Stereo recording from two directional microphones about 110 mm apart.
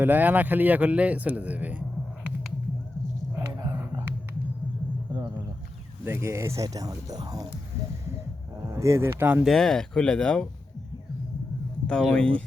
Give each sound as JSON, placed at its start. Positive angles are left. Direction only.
{"t": 0.0, "sound": "speech", "side_deg": -15}
{"t": 6.1, "sound": "speech", "side_deg": -25}
{"t": 8.6, "sound": "speech", "side_deg": -25}
{"t": 9.4, "sound": "speech", "side_deg": 0}
{"t": 11.9, "sound": "speech", "side_deg": 10}